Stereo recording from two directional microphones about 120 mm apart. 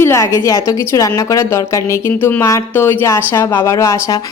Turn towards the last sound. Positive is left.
turn(degrees=25)  # may be behind; listen again after turning